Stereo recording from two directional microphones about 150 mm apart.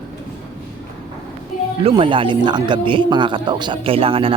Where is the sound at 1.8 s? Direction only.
40° right (ahead or behind).